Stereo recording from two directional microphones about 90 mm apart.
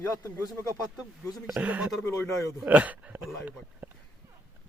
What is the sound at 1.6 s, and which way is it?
Speech, 15° right (ahead or behind).